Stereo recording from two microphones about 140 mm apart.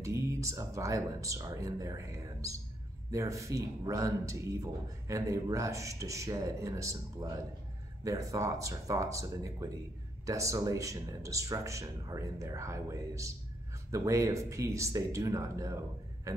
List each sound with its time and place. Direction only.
0.0 s a man's voice: 20° right (ahead or behind)
16.3 s music: 25° right (ahead or behind)